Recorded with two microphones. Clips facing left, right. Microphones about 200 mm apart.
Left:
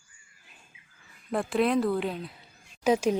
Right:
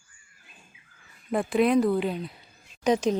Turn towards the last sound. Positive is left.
turn(degrees=5)  # may be behind; listen again after turning